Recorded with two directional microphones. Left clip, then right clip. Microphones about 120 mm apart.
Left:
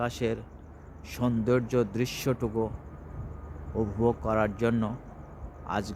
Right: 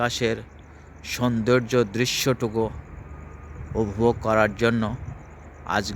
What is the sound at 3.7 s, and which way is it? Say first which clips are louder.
Speech: right 5 dB; 20° right (ahead or behind).